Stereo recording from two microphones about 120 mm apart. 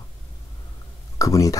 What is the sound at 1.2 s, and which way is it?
Speech, 30° left (ahead or behind).